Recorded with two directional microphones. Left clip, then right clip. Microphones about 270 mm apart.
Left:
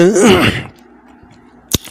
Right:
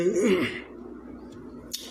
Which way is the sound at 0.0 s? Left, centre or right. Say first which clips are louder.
Left 15 dB; left.